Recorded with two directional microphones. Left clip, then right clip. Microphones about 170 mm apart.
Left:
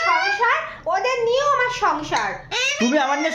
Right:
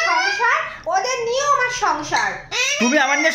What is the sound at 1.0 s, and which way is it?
Speech, 30° left (ahead or behind).